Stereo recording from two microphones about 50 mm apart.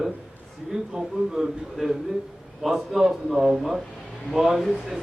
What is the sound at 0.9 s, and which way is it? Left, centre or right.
A man's voice, centre.